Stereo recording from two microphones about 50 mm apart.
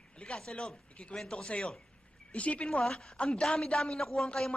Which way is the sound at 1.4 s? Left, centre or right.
Left.